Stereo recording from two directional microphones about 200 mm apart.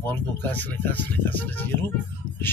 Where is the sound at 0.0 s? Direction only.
10° left (ahead or behind).